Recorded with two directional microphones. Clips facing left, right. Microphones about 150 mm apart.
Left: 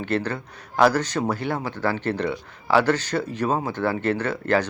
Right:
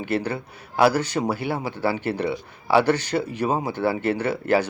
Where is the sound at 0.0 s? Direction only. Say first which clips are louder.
Even; 10° right (ahead or behind).